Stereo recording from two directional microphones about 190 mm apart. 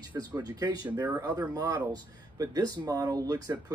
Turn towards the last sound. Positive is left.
turn(degrees=-20)  # may be behind; listen again after turning